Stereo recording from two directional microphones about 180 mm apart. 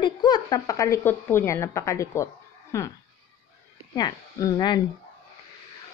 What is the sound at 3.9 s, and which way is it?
Speech, 20° left (ahead or behind).